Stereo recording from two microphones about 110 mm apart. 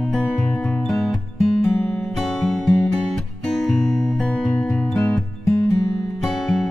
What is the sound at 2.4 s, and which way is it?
Music, 5° left (ahead or behind).